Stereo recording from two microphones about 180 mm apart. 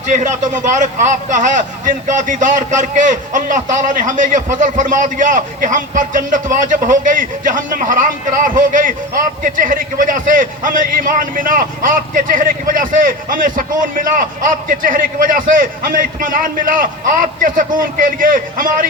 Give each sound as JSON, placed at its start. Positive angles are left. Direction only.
{"t": 0.1, "sound": "a man's voice", "side_deg": -40}